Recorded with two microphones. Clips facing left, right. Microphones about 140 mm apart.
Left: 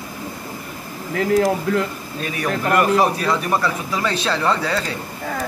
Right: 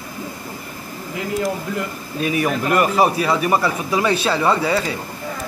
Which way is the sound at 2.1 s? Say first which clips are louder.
Right 4 dB; 5° right (ahead or behind).